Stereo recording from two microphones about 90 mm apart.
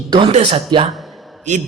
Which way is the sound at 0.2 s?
90° right.